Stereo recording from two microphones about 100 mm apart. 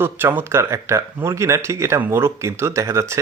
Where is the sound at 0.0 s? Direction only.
20° right (ahead or behind).